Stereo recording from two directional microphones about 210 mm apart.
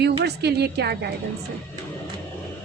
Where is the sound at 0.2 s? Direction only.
50° right (ahead or behind).